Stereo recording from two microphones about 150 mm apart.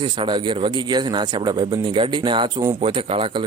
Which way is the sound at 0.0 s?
30° right (ahead or behind).